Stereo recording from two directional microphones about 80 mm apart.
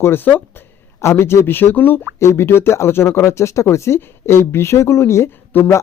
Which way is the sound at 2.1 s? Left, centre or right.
Left.